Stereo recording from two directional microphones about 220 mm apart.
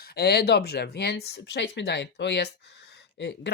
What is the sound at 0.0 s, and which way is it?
Speech, 45° left (ahead or behind).